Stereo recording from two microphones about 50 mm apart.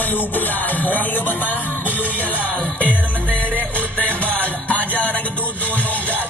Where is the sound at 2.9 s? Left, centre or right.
Right.